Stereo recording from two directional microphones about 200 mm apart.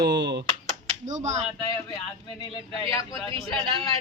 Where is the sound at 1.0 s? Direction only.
35° right (ahead or behind).